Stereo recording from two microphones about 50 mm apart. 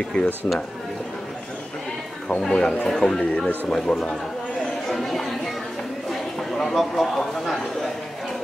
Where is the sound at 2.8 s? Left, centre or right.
Centre.